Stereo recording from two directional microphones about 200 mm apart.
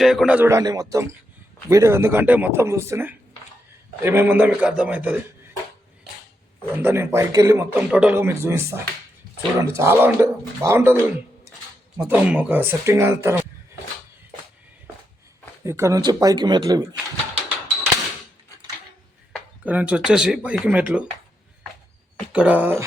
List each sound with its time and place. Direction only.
0.0 s speech: centre (ahead or behind)
6.7 s speech: 10° right (ahead or behind)
15.6 s speech: 15° right (ahead or behind)
19.6 s speech: 5° right (ahead or behind)
22.3 s speech: 5° right (ahead or behind)